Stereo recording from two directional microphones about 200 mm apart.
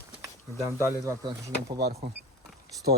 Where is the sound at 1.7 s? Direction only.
50° right (ahead or behind).